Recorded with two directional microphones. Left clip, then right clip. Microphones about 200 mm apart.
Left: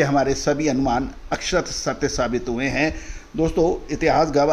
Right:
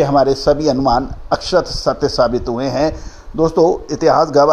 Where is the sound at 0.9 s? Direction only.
5° left (ahead or behind).